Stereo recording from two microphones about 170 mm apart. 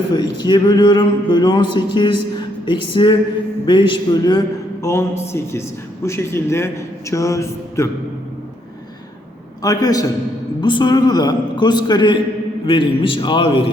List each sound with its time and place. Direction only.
0.1 s a man's voice: 25° left (ahead or behind)
9.6 s a man's voice: 20° left (ahead or behind)